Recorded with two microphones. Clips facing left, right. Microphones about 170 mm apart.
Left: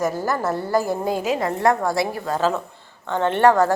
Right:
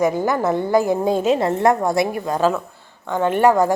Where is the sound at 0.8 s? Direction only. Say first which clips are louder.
Right 4 dB; 20° right (ahead or behind).